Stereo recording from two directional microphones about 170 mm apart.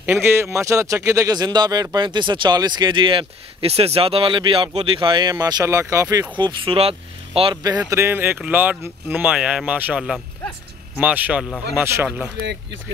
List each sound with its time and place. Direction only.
0.0 s speech: 15° right (ahead or behind); by 7.5 s 35° right (ahead or behind)
7.8 s speech: 15° right (ahead or behind)
12.4 s speech: 90° right